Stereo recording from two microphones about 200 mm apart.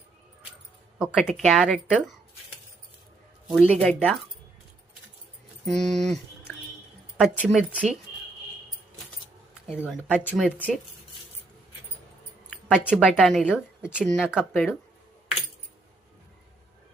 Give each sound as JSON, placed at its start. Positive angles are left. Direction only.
{"t": 0.9, "sound": "speech", "side_deg": 0}
{"t": 3.5, "sound": "speech", "side_deg": 5}
{"t": 5.6, "sound": "speech", "side_deg": 0}
{"t": 7.2, "sound": "speech", "side_deg": 0}
{"t": 9.7, "sound": "speech", "side_deg": 10}
{"t": 12.5, "sound": "a sound", "side_deg": 5}
{"t": 13.0, "sound": "speech", "side_deg": 5}
{"t": 14.0, "sound": "speech", "side_deg": 5}